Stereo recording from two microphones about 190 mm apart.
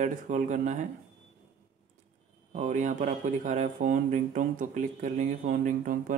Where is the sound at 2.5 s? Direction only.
40° right (ahead or behind).